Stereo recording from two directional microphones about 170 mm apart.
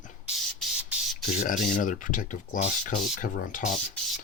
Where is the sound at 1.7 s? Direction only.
50° left (ahead or behind).